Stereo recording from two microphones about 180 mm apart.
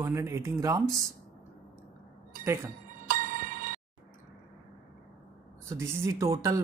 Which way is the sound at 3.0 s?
50° right (ahead or behind).